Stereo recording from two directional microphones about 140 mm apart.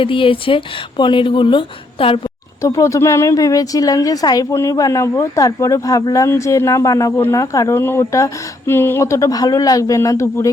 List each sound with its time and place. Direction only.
0.0 s speech: 40° left (ahead or behind)
2.6 s speech: 20° left (ahead or behind)